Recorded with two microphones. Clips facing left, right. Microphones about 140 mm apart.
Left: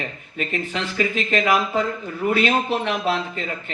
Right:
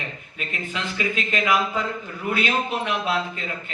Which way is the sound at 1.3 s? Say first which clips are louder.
Left 2 dB; 40° left (ahead or behind).